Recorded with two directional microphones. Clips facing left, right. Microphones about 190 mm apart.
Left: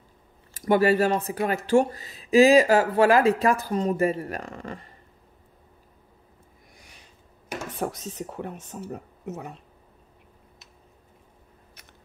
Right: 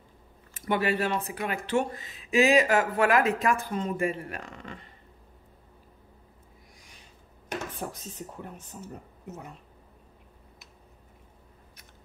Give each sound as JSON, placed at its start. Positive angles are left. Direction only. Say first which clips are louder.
{"t": 0.6, "sound": "speech", "louder": "left 7 dB", "side_deg": 40}
{"t": 7.8, "sound": "speech", "louder": "left 7 dB", "side_deg": 75}